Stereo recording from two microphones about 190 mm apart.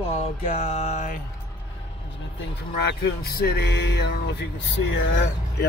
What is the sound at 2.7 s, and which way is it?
Speech, 55° left (ahead or behind).